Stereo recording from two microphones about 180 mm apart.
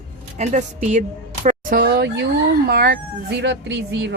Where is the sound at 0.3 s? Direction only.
40° right (ahead or behind).